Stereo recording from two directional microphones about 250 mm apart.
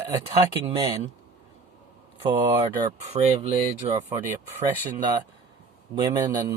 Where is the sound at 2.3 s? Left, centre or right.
Centre.